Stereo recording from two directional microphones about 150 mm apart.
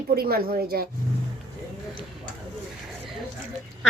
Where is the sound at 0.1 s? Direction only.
90° right.